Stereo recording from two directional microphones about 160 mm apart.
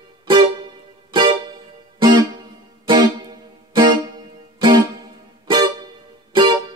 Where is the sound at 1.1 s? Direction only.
30° right (ahead or behind).